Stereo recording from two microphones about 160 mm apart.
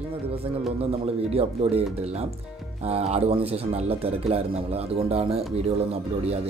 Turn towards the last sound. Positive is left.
turn(degrees=-40)  # may be behind; listen again after turning